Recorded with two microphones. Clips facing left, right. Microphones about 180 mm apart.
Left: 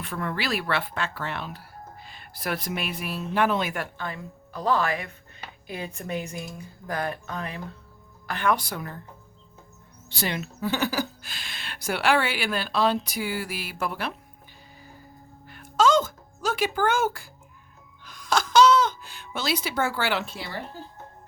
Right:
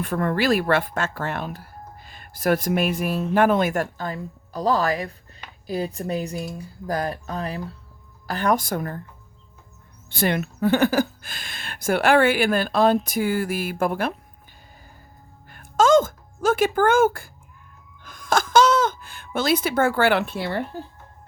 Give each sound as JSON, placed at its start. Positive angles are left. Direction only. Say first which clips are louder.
{"t": 0.0, "sound": "speech", "louder": "right 8 dB", "side_deg": -45}
{"t": 10.1, "sound": "speech", "louder": "right 7 dB", "side_deg": -55}
{"t": 15.4, "sound": "music", "louder": "right 4 dB", "side_deg": -50}
{"t": 18.0, "sound": "a sound", "louder": "right 3 dB", "side_deg": -50}